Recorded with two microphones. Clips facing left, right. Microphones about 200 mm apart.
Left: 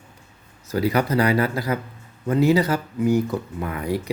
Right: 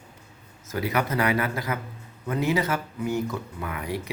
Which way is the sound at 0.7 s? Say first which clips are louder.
Left 6 dB; 35° left (ahead or behind).